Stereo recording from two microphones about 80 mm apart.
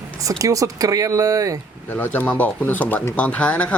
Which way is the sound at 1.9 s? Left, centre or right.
Left.